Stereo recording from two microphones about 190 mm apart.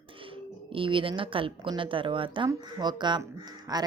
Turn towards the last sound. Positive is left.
turn(degrees=-20)  # may be behind; listen again after turning